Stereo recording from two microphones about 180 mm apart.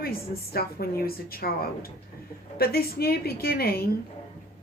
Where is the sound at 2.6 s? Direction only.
60° left (ahead or behind).